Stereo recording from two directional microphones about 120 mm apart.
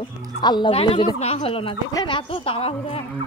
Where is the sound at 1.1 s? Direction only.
65° left (ahead or behind).